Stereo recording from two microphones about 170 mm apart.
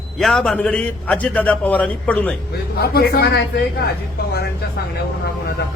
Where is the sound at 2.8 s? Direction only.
65° left (ahead or behind).